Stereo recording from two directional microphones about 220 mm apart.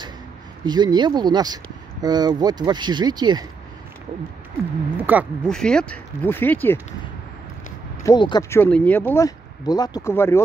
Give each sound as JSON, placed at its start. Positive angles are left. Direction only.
{"t": 0.7, "sound": "speech", "side_deg": -20}
{"t": 4.9, "sound": "speech", "side_deg": -10}
{"t": 5.5, "sound": "speech", "side_deg": 5}
{"t": 8.0, "sound": "speech", "side_deg": 20}